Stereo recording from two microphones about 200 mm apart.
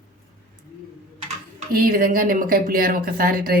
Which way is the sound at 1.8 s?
45° right (ahead or behind).